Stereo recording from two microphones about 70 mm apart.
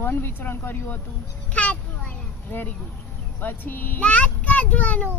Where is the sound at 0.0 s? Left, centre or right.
Left.